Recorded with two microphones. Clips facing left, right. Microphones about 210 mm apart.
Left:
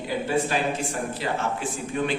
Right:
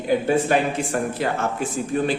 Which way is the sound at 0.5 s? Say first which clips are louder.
Right 6 dB; 55° right (ahead or behind).